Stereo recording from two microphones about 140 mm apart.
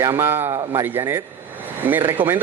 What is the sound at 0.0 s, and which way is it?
Speech, 20° right (ahead or behind).